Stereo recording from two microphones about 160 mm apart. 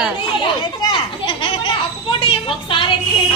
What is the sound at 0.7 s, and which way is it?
Children playing, 30° left (ahead or behind).